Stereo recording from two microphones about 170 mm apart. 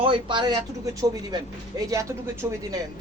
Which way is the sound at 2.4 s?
10° right (ahead or behind).